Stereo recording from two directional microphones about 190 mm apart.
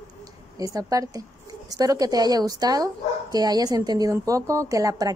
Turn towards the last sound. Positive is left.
turn(degrees=-20)  # may be behind; listen again after turning